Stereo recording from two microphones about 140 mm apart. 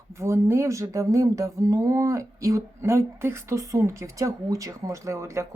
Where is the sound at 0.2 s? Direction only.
20° right (ahead or behind).